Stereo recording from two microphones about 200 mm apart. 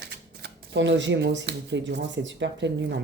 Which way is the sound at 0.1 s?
60° right (ahead or behind).